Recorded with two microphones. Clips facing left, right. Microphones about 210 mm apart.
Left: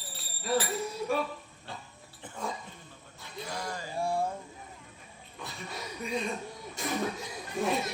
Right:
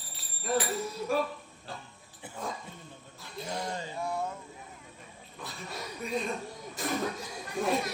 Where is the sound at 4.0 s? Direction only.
30° left (ahead or behind).